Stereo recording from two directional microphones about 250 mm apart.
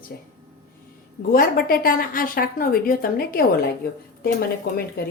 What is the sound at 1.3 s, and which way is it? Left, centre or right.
Speech, left.